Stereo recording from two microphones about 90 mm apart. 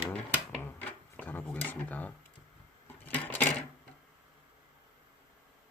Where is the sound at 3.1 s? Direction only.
20° left (ahead or behind).